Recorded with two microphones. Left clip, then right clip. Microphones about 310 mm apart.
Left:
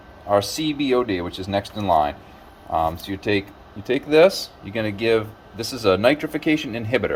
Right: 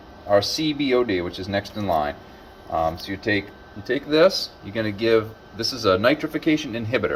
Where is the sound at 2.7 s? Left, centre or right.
Left.